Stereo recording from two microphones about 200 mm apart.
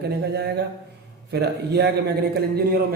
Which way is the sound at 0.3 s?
55° right (ahead or behind).